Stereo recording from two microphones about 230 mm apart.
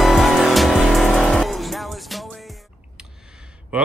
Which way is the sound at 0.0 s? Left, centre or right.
Centre.